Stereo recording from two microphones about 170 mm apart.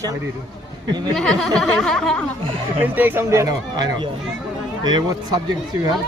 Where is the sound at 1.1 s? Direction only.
5° left (ahead or behind).